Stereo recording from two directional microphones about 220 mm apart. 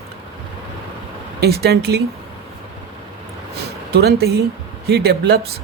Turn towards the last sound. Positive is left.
turn(degrees=-45)  # may be behind; listen again after turning